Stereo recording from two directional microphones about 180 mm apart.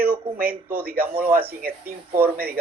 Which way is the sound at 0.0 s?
10° right (ahead or behind).